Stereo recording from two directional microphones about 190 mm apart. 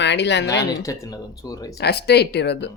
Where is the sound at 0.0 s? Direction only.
65° left (ahead or behind).